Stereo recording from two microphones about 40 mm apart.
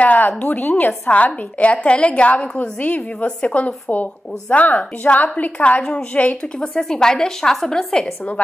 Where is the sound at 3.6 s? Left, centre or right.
Left.